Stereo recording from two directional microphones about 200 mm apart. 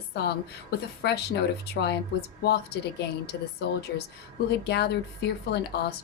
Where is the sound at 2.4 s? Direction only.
55° left (ahead or behind).